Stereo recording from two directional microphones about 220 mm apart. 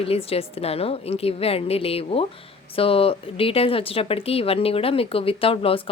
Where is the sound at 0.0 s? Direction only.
25° left (ahead or behind).